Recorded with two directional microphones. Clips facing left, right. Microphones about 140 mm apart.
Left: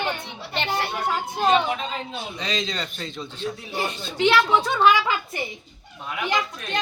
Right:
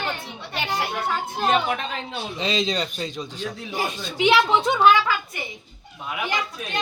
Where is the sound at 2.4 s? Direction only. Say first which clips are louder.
Right 5 dB; 20° right (ahead or behind).